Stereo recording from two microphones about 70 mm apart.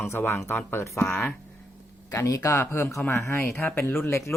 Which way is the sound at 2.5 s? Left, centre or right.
Left.